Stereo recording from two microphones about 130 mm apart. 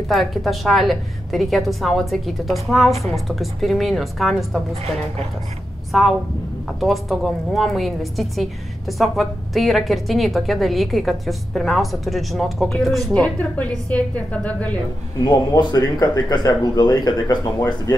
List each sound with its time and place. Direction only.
0.1 s a woman's voice: centre (ahead or behind)
5.9 s a woman's voice: centre (ahead or behind)
15.1 s speech: 30° left (ahead or behind)